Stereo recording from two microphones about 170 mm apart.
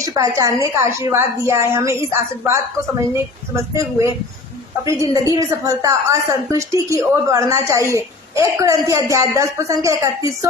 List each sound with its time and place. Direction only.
0.0 s a woman's voice: 20° right (ahead or behind)